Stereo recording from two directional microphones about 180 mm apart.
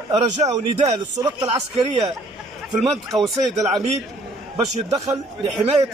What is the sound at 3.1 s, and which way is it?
Speech, centre (ahead or behind).